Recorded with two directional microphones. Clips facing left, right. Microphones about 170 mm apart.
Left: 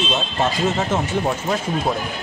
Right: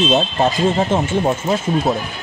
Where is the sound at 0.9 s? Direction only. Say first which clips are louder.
Right 4 dB; 30° right (ahead or behind).